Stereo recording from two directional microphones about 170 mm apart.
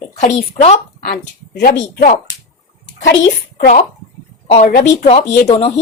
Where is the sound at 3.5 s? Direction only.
55° left (ahead or behind).